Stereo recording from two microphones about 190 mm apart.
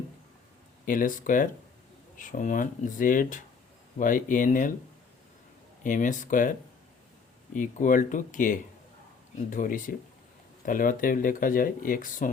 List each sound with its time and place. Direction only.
0.9 s speech: 45° left (ahead or behind)
5.8 s speech: 45° left (ahead or behind)